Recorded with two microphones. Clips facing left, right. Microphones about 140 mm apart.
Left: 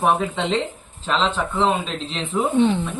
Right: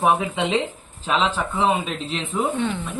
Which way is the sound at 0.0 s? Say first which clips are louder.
Even; 5° right (ahead or behind).